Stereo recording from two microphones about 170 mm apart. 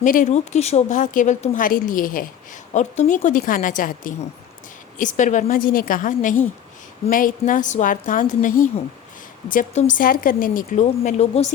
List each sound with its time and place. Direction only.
0.0 s speech: 50° left (ahead or behind)